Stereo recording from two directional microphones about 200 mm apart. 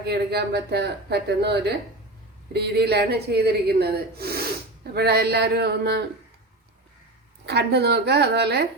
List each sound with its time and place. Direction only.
0.0 s speech: 55° right (ahead or behind)
7.4 s speech: 55° right (ahead or behind)